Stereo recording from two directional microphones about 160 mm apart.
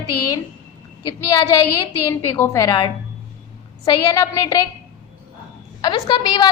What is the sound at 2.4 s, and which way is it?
A woman's voice, 20° left (ahead or behind).